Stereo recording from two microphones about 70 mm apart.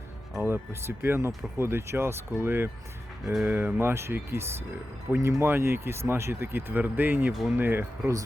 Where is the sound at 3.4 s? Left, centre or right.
Right.